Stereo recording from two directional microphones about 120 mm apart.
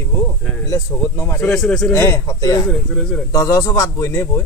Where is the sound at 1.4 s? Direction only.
5° left (ahead or behind).